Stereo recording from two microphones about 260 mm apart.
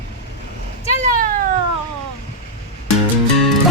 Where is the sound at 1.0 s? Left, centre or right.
Right.